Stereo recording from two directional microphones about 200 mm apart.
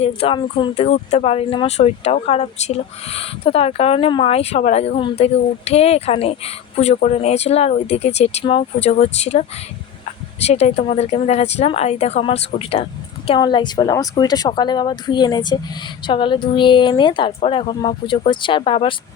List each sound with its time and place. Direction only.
0.0 s speech: 30° left (ahead or behind)